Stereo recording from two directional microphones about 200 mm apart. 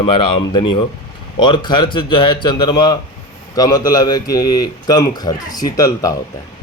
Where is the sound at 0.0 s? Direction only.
25° left (ahead or behind).